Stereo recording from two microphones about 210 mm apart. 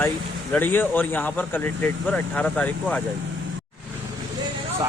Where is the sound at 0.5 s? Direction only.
10° left (ahead or behind).